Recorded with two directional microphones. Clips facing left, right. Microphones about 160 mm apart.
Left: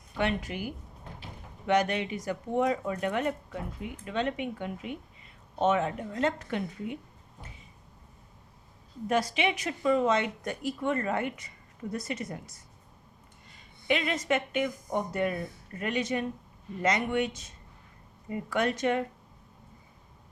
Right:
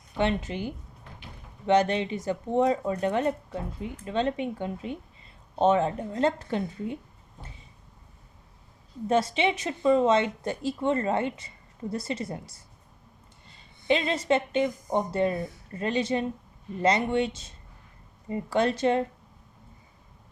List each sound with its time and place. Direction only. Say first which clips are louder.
0.2 s speech: right 3 dB; 25° right (ahead or behind)
9.0 s speech: right 3 dB; 25° right (ahead or behind)